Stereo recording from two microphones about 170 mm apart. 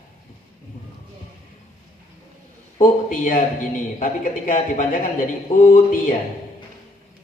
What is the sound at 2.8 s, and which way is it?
A man's voice, 55° left (ahead or behind).